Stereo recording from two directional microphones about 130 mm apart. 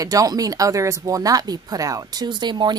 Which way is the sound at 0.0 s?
25° right (ahead or behind).